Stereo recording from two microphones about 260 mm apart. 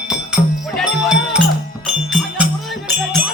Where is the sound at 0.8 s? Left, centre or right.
Centre.